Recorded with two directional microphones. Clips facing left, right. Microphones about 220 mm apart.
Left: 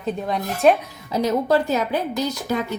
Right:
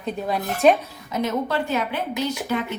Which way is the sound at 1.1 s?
35° left (ahead or behind).